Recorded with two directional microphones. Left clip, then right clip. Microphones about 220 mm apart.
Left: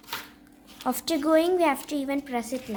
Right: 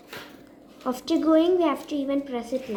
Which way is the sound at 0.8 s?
40° left (ahead or behind).